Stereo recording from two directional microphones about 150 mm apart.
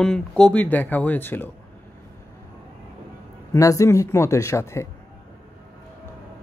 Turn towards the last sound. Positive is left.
turn(degrees=20)  # may be behind; listen again after turning